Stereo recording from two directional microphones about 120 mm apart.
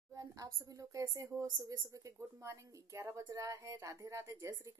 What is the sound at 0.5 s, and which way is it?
A woman's voice, 30° right (ahead or behind).